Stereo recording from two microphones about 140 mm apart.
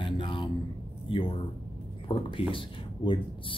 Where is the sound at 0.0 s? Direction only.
35° left (ahead or behind).